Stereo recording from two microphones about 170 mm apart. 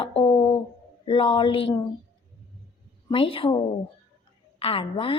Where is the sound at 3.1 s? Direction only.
30° left (ahead or behind).